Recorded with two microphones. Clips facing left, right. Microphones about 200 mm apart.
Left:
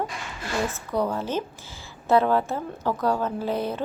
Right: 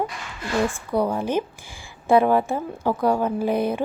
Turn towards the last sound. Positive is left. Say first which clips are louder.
# right 5 dB
turn(degrees=-15)  # may be behind; listen again after turning